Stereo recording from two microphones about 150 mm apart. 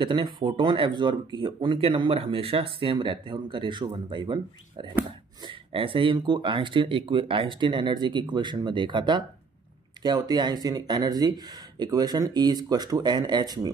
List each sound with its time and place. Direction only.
0.0 s speech: 30° right (ahead or behind)